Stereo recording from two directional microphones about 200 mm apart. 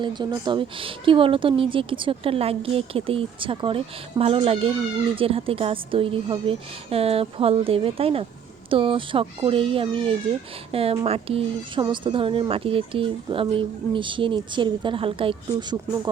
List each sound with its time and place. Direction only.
0.0 s speech: 20° right (ahead or behind)